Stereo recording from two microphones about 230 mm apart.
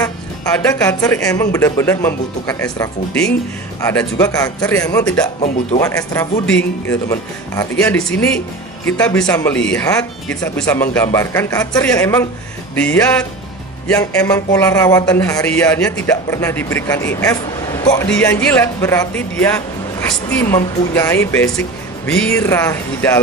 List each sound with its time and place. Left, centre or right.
0.0 s speech: centre
5.2 s speech: left
5.8 s speech: centre
13.9 s speech: centre